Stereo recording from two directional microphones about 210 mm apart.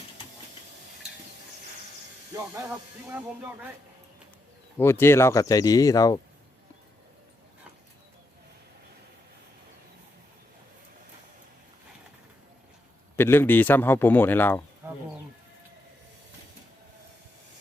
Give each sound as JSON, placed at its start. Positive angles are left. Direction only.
{"t": 2.3, "sound": "speech", "side_deg": -10}
{"t": 4.8, "sound": "a man's voice", "side_deg": 10}
{"t": 13.1, "sound": "a man's voice", "side_deg": 10}
{"t": 14.8, "sound": "a sound", "side_deg": -10}